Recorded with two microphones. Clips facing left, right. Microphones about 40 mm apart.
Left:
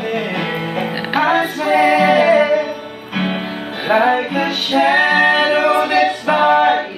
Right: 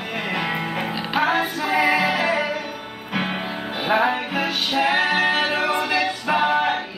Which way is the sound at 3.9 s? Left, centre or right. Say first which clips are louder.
Left 6 dB; centre.